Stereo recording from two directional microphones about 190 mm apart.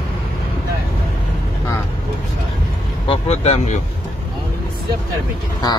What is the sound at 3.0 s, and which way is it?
Speech, 35° left (ahead or behind).